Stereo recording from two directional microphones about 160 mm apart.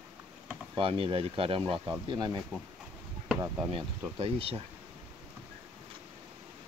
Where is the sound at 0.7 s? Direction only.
35° right (ahead or behind).